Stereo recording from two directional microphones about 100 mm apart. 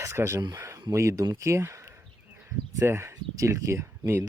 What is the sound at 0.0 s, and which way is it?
Speech, 30° right (ahead or behind).